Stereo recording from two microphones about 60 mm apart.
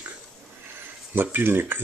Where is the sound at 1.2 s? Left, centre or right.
Right.